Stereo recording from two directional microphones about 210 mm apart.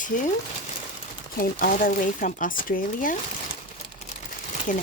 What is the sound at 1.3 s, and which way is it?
Speech, 45° left (ahead or behind).